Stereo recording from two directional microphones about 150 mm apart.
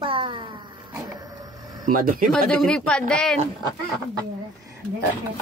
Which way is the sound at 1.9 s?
65° right (ahead or behind).